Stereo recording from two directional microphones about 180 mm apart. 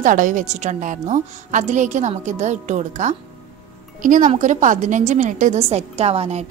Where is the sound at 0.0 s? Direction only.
45° right (ahead or behind).